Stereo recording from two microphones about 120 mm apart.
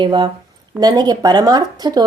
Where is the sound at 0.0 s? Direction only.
40° right (ahead or behind).